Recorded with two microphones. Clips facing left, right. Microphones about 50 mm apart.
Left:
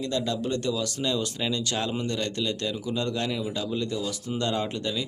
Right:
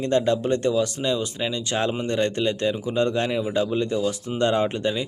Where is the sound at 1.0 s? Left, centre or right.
Centre.